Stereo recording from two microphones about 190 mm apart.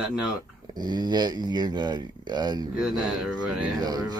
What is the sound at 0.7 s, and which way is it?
Speech, 20° right (ahead or behind).